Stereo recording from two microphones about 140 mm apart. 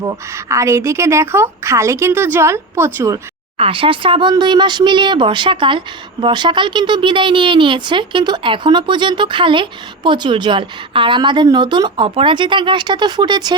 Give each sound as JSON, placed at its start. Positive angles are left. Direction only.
{"t": 0.0, "sound": "a woman's voice", "side_deg": -20}
{"t": 3.6, "sound": "speech", "side_deg": -40}